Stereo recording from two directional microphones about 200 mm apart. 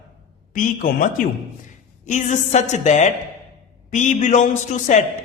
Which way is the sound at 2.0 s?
35° left (ahead or behind).